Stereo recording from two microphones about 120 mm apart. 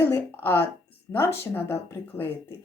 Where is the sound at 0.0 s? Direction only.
20° left (ahead or behind).